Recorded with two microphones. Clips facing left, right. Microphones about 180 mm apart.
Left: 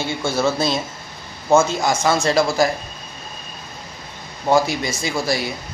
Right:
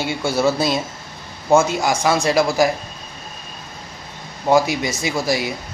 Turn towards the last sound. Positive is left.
turn(degrees=-15)  # may be behind; listen again after turning